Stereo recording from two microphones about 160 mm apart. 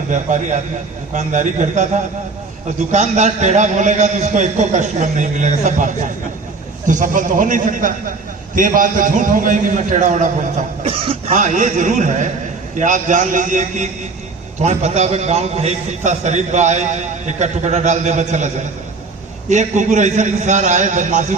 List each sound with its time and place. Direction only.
0.1 s a man's voice: 50° right (ahead or behind)
10.8 s a man's voice: 40° right (ahead or behind)